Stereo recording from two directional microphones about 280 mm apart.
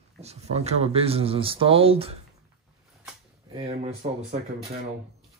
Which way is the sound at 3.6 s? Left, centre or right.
Right.